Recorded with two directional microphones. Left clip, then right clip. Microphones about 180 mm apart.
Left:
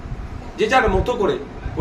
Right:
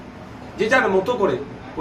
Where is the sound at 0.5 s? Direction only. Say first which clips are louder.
Left 1 dB; 20° left (ahead or behind).